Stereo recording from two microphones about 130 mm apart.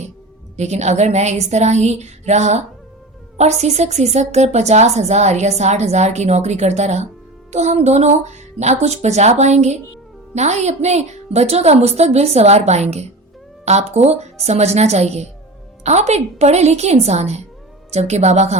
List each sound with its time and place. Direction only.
0.5 s a woman's voice: 60° right (ahead or behind)